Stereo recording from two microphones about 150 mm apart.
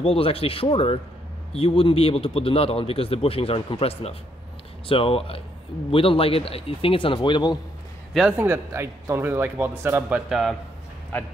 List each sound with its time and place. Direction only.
0.0 s a man's voice: 40° left (ahead or behind)
8.1 s a man's voice: 5° right (ahead or behind)
8.4 s a man's voice: 15° right (ahead or behind)